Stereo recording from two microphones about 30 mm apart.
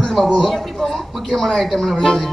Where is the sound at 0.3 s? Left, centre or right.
Centre.